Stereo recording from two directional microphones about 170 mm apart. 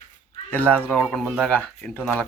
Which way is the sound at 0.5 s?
10° left (ahead or behind).